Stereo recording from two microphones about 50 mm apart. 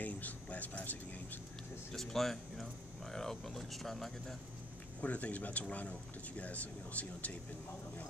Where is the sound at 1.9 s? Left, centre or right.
Centre.